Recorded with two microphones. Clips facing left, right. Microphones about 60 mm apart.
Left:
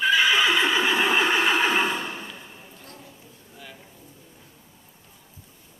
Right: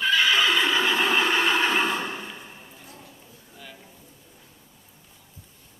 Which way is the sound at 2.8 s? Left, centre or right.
Centre.